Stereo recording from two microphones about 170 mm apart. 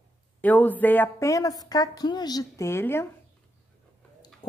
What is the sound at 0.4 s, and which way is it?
A woman's voice, 10° left (ahead or behind).